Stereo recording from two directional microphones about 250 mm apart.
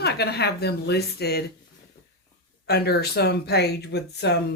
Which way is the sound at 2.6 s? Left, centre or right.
Left.